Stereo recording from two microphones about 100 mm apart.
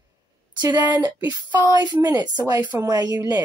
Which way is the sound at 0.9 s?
45° right (ahead or behind).